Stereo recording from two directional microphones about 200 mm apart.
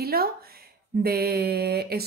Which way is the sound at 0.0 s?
50° right (ahead or behind).